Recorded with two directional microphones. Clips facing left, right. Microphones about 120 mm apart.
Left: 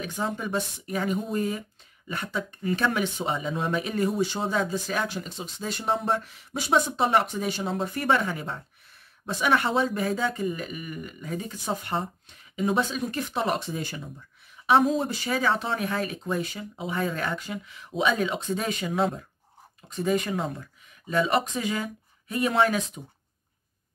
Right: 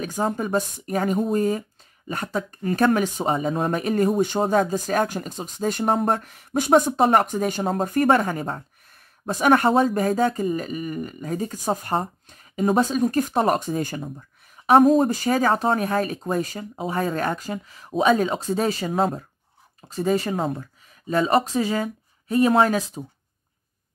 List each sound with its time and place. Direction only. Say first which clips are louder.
0.0 s speech: right 5 dB; 45° right (ahead or behind)